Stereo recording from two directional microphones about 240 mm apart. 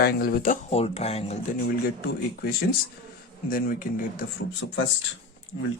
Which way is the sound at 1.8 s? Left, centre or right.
Left.